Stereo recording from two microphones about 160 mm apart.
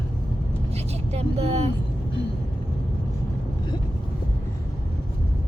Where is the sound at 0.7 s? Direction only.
40° right (ahead or behind).